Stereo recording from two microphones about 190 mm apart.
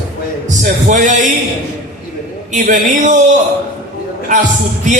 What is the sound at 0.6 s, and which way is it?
Speech, 40° right (ahead or behind).